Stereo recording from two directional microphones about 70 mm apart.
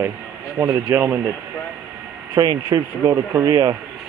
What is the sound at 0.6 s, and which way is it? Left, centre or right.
Speech, right.